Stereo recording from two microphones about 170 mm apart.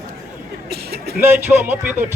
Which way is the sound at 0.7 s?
70° right (ahead or behind).